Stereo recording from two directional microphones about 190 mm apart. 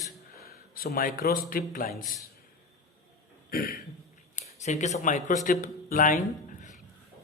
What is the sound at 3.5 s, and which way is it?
Speech, 50° left (ahead or behind).